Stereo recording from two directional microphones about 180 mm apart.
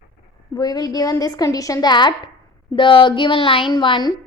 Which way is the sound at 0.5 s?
20° left (ahead or behind).